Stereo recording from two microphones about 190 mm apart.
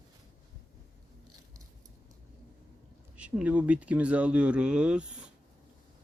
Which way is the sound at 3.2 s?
5° right (ahead or behind).